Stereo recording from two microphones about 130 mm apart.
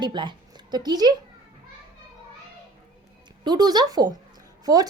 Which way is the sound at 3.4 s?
35° right (ahead or behind).